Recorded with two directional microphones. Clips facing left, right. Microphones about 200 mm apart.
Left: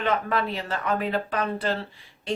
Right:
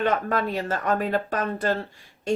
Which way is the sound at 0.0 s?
45° right (ahead or behind).